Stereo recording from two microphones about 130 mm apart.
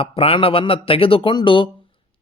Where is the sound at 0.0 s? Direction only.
45° left (ahead or behind).